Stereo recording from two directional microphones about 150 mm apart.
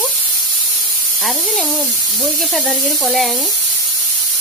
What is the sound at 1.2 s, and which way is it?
Speech, centre (ahead or behind).